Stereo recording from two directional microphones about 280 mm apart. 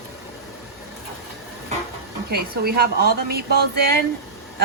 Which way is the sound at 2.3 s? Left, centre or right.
Right.